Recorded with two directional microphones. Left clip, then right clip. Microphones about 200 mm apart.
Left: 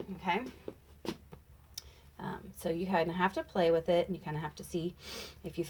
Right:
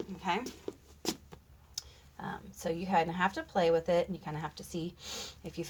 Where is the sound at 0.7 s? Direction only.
45° right (ahead or behind).